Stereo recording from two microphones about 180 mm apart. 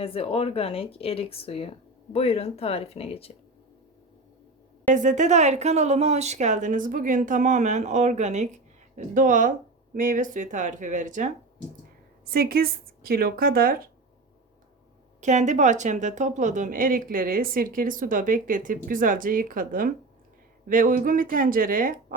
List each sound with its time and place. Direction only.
0.0 s a woman's voice: 30° left (ahead or behind)
4.9 s a woman's voice: 45° right (ahead or behind)
12.2 s speech: 55° right (ahead or behind)
15.2 s a woman's voice: 40° right (ahead or behind)